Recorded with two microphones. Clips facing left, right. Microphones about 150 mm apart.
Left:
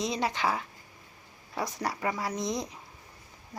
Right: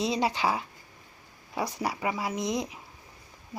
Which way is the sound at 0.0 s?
25° right (ahead or behind).